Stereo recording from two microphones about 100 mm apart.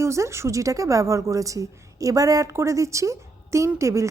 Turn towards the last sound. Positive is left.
turn(degrees=-30)  # may be behind; listen again after turning